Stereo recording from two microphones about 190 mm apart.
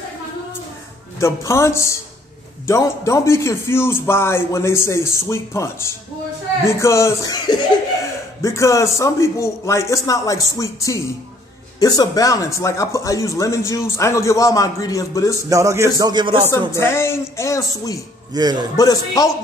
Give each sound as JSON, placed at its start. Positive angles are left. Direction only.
{"t": 1.2, "sound": "speech", "side_deg": 15}
{"t": 15.5, "sound": "a man's voice", "side_deg": -15}
{"t": 16.7, "sound": "speech", "side_deg": 15}
{"t": 18.3, "sound": "a man's voice", "side_deg": -20}
{"t": 18.8, "sound": "a man's voice", "side_deg": 20}